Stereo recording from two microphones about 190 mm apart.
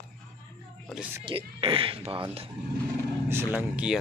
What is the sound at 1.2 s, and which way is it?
Speech, 30° right (ahead or behind).